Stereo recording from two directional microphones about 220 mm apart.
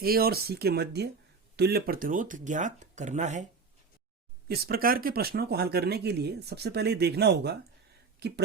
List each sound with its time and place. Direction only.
0.0 s speech: 45° right (ahead or behind)
4.4 s speech: 45° right (ahead or behind)